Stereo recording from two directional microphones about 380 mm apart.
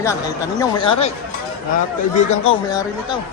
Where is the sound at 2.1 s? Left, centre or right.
Centre.